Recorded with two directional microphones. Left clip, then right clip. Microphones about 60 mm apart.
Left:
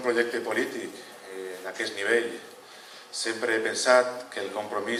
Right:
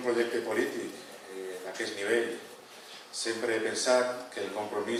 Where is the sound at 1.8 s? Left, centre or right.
Left.